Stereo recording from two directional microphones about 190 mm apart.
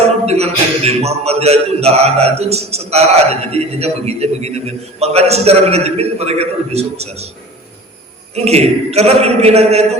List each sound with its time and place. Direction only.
0.3 s a man's voice: 35° right (ahead or behind)
8.4 s a man's voice: 35° right (ahead or behind)